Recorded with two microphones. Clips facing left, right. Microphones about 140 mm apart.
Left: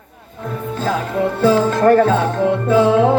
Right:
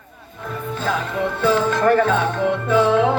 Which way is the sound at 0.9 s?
35° left (ahead or behind).